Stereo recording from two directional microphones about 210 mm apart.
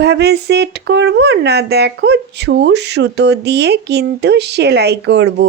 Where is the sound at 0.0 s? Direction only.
50° right (ahead or behind).